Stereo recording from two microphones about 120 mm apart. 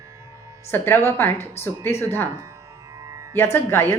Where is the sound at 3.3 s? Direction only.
20° left (ahead or behind).